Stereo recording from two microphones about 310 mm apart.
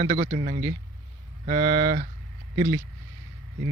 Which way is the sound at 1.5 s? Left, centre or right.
Right.